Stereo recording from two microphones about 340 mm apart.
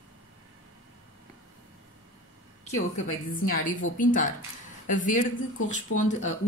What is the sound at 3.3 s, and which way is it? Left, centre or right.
Speech, left.